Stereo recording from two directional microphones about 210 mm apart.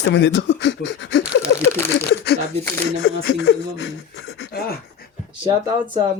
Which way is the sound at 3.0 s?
55° left (ahead or behind).